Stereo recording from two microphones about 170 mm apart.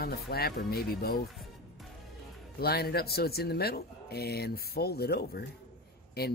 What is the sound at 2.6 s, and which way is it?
Speech, 65° left (ahead or behind).